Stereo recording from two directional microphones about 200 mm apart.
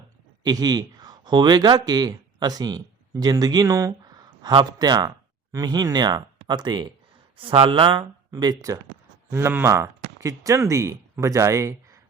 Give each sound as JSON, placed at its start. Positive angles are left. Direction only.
{"t": 0.4, "sound": "speech", "side_deg": -20}